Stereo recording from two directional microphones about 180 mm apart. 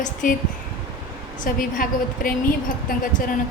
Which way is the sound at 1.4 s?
50° left (ahead or behind).